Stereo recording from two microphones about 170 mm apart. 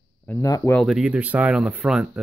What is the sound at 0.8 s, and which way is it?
Speech, centre (ahead or behind).